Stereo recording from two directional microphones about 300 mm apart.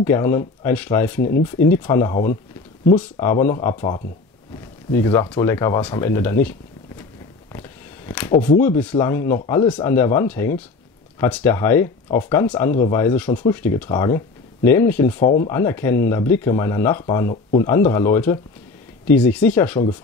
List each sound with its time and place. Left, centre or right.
0.0 s speech: centre
8.1 s speech: centre
15.2 s speech: left
15.5 s speech: centre